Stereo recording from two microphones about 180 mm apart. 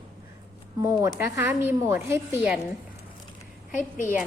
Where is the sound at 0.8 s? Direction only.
15° right (ahead or behind).